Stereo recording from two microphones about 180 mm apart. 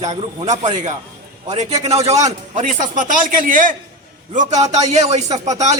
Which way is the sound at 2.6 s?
45° right (ahead or behind).